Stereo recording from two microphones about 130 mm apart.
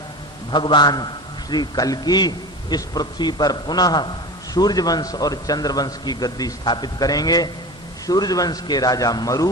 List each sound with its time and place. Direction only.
0.5 s a man's voice: 35° left (ahead or behind)